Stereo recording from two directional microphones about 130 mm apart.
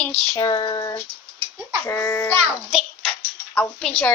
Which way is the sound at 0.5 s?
45° left (ahead or behind).